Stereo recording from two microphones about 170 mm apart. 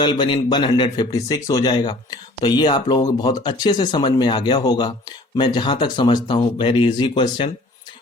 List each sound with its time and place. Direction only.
0.0 s speech: 30° left (ahead or behind)